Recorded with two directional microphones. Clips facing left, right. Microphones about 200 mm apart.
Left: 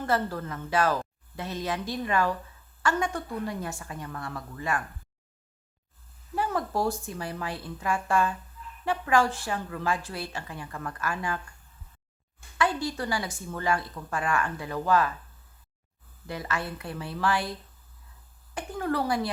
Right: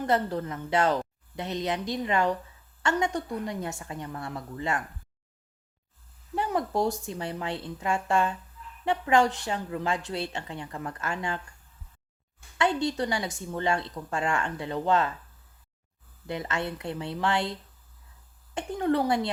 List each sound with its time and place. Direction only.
0.0 s a woman's voice: 20° right (ahead or behind)
6.3 s a woman's voice: 20° right (ahead or behind)
12.5 s a woman's voice: 25° right (ahead or behind)
16.2 s a woman's voice: 20° right (ahead or behind)